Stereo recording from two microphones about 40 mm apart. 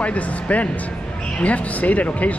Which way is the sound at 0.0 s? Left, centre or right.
Left.